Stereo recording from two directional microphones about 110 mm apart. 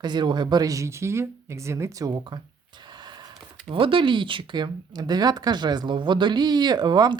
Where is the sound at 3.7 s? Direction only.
50° right (ahead or behind).